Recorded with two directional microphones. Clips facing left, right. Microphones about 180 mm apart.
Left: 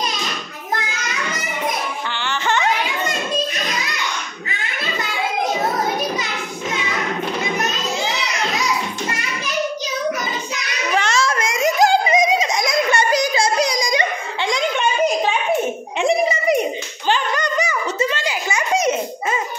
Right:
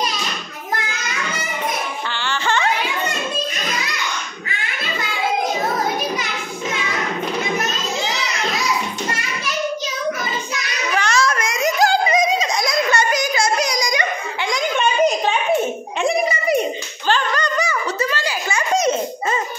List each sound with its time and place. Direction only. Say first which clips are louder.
2.1 s music: even; 20° left (ahead or behind)
10.5 s singing: left 3 dB; 25° left (ahead or behind)
16.0 s a sound: left 2 dB; 20° left (ahead or behind)
18.7 s giggle: right 1 dB; 10° left (ahead or behind)